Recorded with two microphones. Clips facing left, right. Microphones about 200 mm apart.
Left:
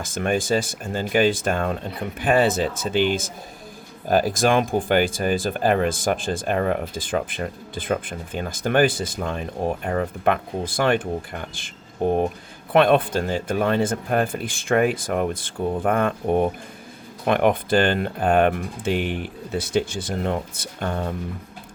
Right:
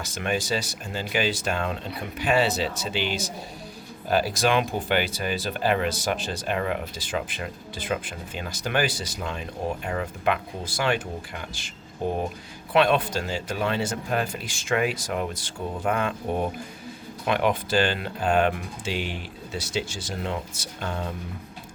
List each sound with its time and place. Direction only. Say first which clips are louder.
0.0 s speech: left 5 dB; 50° left (ahead or behind)